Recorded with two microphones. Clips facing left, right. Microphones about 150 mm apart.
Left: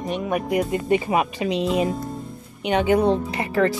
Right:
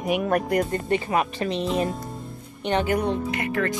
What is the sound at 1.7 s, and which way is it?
Speech, centre (ahead or behind).